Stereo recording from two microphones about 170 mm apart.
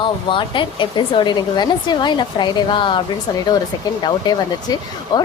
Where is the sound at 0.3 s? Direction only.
30° left (ahead or behind).